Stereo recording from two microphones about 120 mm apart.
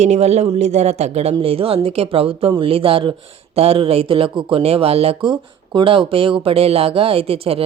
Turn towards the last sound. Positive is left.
turn(degrees=-50)  # may be behind; listen again after turning